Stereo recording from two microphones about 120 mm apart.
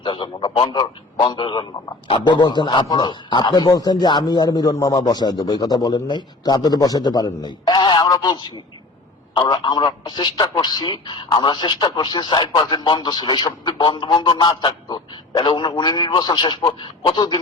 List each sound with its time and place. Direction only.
0.0 s a man's voice: 45° left (ahead or behind)